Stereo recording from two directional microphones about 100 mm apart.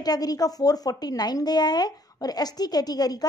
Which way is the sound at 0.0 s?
40° left (ahead or behind).